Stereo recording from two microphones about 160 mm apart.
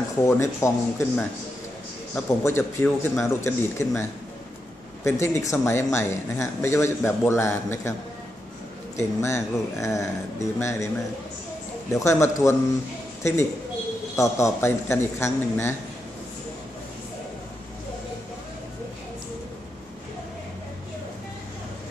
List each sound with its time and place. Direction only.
0.2 s speech: 15° left (ahead or behind)
8.9 s speech: 20° left (ahead or behind)
11.9 s speech: 15° left (ahead or behind)